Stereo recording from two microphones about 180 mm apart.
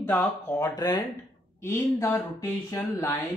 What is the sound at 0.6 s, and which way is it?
Speech, 25° left (ahead or behind).